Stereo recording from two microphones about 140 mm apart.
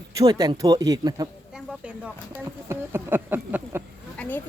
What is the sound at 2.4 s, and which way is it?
Speech, 15° right (ahead or behind).